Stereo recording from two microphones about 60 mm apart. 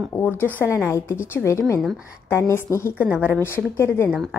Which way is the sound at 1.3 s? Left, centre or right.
Left.